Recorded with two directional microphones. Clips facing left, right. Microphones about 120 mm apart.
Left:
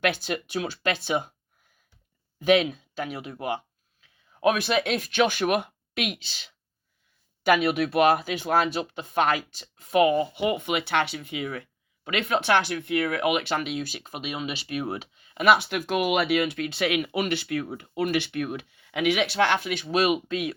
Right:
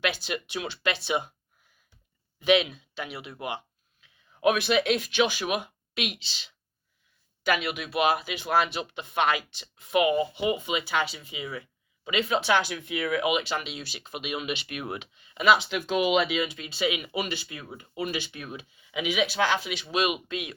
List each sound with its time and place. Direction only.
0.0 s speech: 50° left (ahead or behind)
2.4 s speech: 40° left (ahead or behind)
7.9 s speech: 50° left (ahead or behind)
15.6 s speech: 60° left (ahead or behind); by 20.5 s 40° left (ahead or behind)